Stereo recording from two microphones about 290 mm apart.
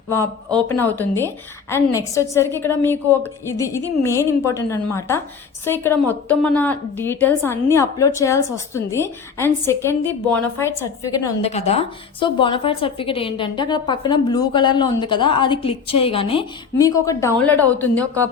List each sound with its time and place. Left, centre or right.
0.1 s a woman's voice: centre
11.4 s a woman's voice: left; by 18.3 s centre